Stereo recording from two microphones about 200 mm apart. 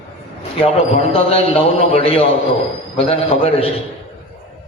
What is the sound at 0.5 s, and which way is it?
A man's voice, 30° left (ahead or behind).